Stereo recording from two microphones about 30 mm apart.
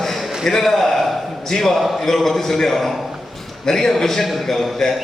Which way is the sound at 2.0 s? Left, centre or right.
Centre.